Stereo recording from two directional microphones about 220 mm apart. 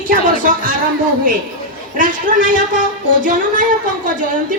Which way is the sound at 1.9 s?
35° right (ahead or behind).